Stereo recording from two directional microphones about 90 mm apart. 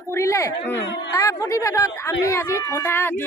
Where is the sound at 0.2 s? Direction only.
35° left (ahead or behind).